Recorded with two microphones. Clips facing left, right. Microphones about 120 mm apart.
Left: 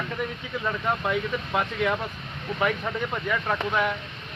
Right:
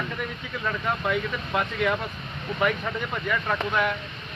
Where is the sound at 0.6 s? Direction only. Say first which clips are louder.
Even; 20° left (ahead or behind).